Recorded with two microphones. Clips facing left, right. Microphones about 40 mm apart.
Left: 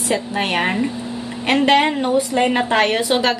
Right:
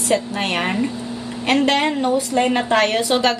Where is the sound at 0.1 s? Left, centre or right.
Centre.